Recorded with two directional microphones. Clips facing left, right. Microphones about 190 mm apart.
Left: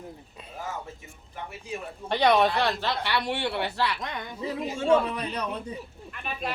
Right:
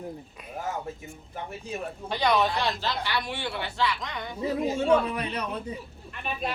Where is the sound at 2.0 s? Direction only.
65° left (ahead or behind).